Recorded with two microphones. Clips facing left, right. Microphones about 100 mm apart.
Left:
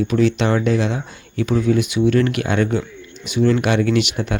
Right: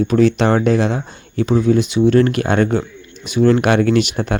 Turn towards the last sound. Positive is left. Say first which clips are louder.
# right 3 dB
turn(degrees=-40)  # may be behind; listen again after turning